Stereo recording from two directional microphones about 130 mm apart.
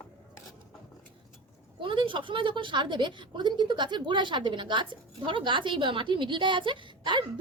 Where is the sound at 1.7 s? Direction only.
40° right (ahead or behind).